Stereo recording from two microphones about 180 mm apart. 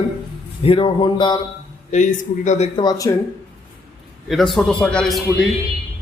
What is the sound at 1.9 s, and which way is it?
Speech, 45° left (ahead or behind).